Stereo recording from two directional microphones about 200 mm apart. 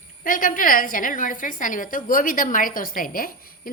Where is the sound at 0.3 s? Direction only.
45° left (ahead or behind).